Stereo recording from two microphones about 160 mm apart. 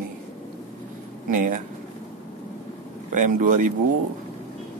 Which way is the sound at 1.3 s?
55° right (ahead or behind).